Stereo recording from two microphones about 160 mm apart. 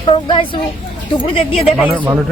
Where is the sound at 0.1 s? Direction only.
30° left (ahead or behind).